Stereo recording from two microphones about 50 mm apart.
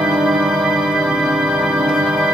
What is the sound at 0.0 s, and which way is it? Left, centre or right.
Music, centre.